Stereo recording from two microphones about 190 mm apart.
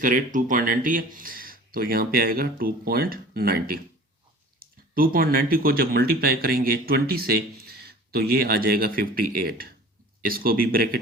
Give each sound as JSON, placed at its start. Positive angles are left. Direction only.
{"t": 0.0, "sound": "speech", "side_deg": -45}